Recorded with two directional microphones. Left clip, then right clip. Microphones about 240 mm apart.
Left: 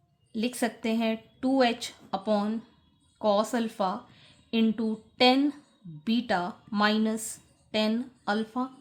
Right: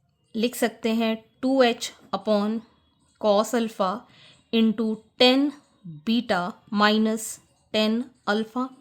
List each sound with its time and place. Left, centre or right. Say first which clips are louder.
0.3 s a woman's voice: right 5 dB; right